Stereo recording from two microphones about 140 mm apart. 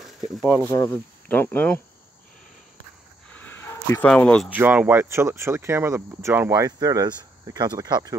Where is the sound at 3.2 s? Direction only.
10° left (ahead or behind).